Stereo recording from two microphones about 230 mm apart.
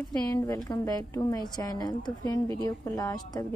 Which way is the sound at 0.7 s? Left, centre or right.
Centre.